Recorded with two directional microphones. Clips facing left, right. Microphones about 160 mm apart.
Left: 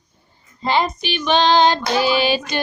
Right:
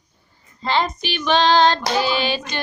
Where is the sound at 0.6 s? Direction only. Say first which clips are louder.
Left 2 dB; 10° left (ahead or behind).